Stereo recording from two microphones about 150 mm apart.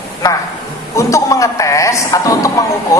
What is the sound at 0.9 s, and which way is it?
A woman's voice, 20° left (ahead or behind).